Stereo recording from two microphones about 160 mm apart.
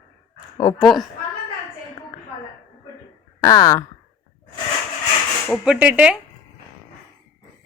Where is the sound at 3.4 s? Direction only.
20° left (ahead or behind).